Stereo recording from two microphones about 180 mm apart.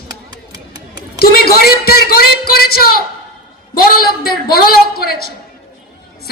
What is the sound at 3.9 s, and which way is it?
A woman's voice, 55° left (ahead or behind).